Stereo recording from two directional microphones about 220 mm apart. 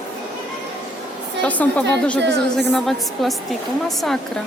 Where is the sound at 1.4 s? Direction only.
5° left (ahead or behind).